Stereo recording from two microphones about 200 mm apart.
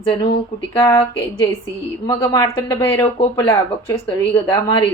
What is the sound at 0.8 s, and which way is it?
A woman's voice, 15° left (ahead or behind).